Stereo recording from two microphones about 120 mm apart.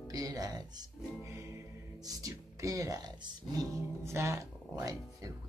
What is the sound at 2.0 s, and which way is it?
Speech, 30° right (ahead or behind).